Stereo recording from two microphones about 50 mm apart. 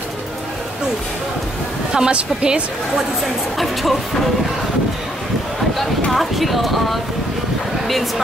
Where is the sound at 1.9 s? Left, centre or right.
Centre.